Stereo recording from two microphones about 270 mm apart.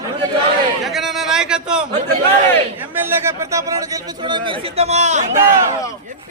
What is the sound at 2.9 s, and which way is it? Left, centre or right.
A man's voice, centre.